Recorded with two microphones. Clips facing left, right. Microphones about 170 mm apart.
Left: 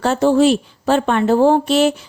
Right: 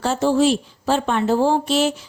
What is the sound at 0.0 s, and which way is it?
A woman's voice, 60° left (ahead or behind).